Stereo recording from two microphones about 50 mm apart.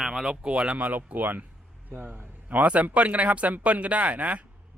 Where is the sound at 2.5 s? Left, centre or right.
Right.